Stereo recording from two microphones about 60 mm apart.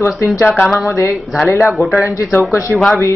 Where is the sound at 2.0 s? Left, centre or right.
Left.